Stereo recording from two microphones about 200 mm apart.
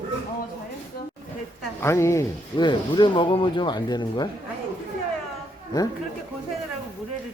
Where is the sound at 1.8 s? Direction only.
15° left (ahead or behind).